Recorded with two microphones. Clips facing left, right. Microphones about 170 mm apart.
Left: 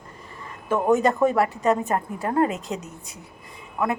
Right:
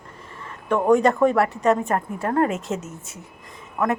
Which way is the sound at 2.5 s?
Centre (ahead or behind).